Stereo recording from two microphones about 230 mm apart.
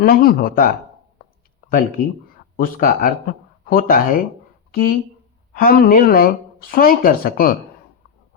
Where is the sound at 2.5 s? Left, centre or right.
Left.